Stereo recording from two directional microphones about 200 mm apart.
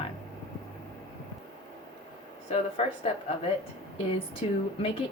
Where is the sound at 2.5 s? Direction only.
30° left (ahead or behind).